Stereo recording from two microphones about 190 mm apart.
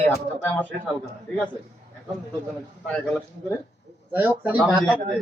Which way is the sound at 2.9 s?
5° left (ahead or behind).